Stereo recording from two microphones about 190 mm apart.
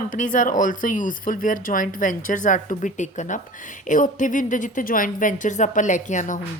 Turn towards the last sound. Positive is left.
turn(degrees=40)  # may be behind; listen again after turning